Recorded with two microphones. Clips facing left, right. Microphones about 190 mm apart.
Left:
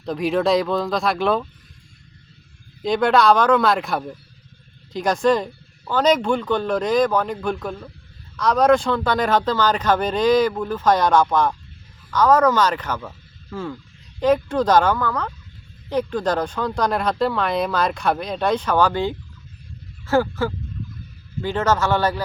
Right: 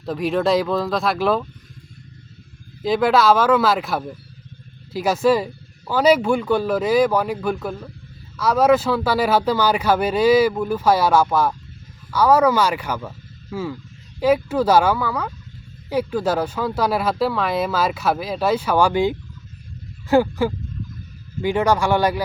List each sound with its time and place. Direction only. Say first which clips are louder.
0.0 s speech: even; centre (ahead or behind)
2.8 s speech: even; 5° right (ahead or behind)